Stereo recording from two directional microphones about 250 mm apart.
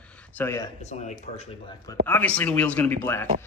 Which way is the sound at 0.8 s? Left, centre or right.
Left.